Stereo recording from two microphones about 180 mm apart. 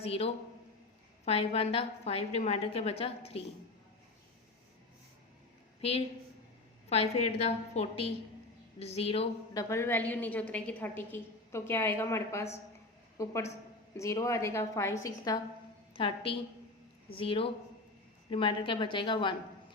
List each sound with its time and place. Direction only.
0.0 s a woman's voice: 35° left (ahead or behind)
6.9 s a woman's voice: 35° left (ahead or behind)
9.6 s a woman's voice: 15° left (ahead or behind)
16.0 s a woman's voice: 30° left (ahead or behind)